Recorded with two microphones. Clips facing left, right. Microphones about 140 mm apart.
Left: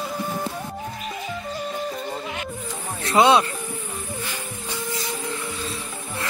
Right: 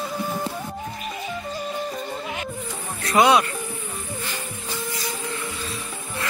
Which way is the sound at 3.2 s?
25° left (ahead or behind).